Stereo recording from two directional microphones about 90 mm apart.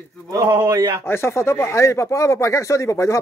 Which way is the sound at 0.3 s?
35° right (ahead or behind).